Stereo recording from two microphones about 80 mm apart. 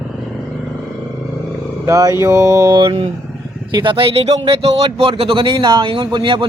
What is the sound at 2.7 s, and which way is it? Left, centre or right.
Speech, right.